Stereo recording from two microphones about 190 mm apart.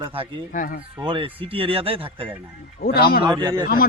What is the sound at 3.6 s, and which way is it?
Speech, 50° left (ahead or behind).